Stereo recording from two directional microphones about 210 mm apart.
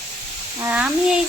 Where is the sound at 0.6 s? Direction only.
5° right (ahead or behind).